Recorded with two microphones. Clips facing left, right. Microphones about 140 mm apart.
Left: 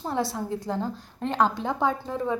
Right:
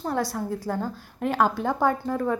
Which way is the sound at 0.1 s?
25° left (ahead or behind).